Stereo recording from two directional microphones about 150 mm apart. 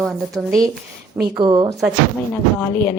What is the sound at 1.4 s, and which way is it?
Speech, 20° right (ahead or behind).